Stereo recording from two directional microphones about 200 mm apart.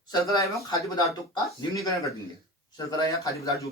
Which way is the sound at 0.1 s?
20° left (ahead or behind).